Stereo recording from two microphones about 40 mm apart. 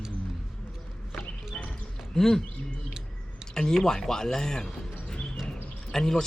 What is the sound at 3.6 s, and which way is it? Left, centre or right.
Speech, centre.